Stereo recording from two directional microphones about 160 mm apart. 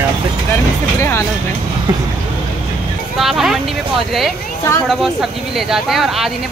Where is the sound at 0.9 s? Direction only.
15° left (ahead or behind).